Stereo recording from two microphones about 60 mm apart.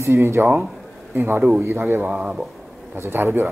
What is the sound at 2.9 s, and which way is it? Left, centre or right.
Speech, right.